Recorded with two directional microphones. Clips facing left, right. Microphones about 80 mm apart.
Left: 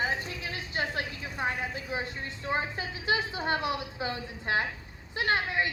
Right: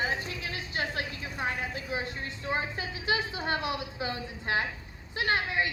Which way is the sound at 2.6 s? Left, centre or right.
Left.